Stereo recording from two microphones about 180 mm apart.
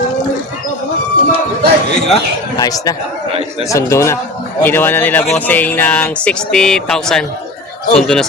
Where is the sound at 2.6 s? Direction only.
20° left (ahead or behind).